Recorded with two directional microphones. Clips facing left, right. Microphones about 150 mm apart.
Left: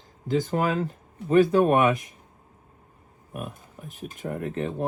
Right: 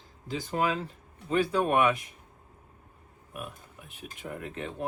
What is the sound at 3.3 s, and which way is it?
Speech, 40° left (ahead or behind).